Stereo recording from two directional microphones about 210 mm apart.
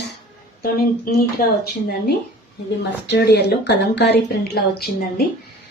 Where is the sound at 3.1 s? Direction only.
50° left (ahead or behind).